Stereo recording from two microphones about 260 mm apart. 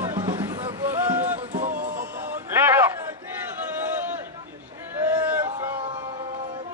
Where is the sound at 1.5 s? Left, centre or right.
Right.